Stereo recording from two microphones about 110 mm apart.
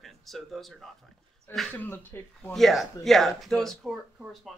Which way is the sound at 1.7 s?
15° left (ahead or behind).